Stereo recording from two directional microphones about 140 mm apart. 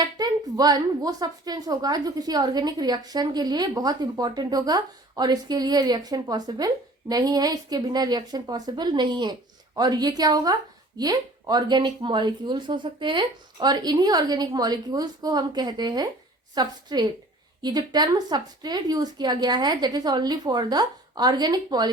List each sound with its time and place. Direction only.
0.0 s a woman's voice: 30° right (ahead or behind)